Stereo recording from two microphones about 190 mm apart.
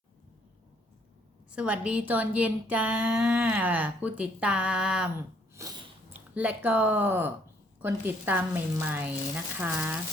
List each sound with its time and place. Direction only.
1.5 s speech: 5° right (ahead or behind)
5.5 s a sound: 20° right (ahead or behind)
6.3 s speech: 5° right (ahead or behind)